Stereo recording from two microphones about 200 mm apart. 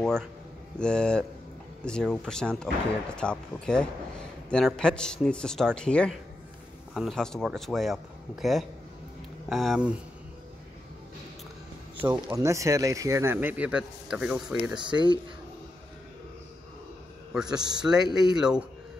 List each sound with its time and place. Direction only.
0.7 s speech: 5° left (ahead or behind)
12.0 s speech: 10° right (ahead or behind)
14.8 s speech: 25° right (ahead or behind)
17.3 s a man's voice: 5° right (ahead or behind)
17.6 s speech: 20° right (ahead or behind)
17.8 s speech: 5° right (ahead or behind)